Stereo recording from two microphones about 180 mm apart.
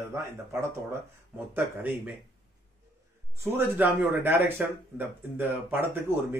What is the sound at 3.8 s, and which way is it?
Speech, 10° right (ahead or behind).